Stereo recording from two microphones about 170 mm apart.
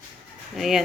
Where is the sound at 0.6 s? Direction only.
Centre (ahead or behind).